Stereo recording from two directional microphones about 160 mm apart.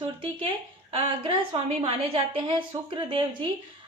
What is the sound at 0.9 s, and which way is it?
A woman's voice, 35° right (ahead or behind).